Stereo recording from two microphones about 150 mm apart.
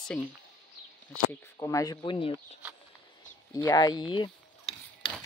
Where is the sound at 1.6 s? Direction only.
20° left (ahead or behind).